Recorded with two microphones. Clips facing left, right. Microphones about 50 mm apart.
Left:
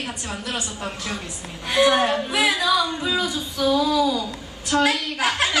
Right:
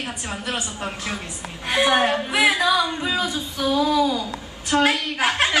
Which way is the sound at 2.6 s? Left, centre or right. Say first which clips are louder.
Right 1 dB; centre.